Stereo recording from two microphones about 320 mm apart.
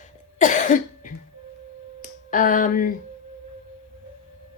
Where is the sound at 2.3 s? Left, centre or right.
Left.